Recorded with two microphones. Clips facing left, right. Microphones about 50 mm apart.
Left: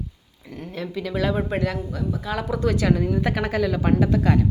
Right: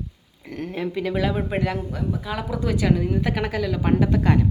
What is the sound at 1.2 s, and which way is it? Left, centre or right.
Speech, centre.